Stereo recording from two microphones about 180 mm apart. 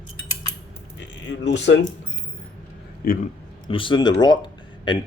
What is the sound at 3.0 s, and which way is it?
Speech, 55° left (ahead or behind).